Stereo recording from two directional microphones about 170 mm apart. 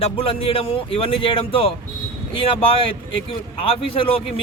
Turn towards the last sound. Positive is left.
turn(degrees=35)  # may be behind; listen again after turning